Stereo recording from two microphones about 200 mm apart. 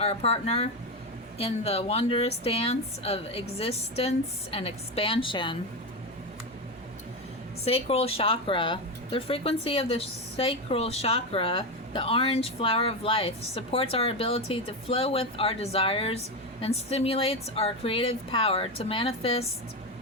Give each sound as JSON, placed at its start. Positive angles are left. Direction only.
{"t": 0.0, "sound": "speech", "side_deg": 30}
{"t": 7.6, "sound": "speech", "side_deg": 30}